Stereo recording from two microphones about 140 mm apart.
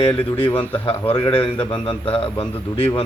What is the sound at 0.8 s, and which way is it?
Speech, 40° left (ahead or behind).